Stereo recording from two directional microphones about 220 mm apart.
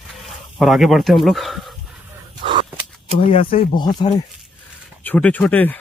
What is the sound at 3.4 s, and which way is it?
Speech, 40° left (ahead or behind).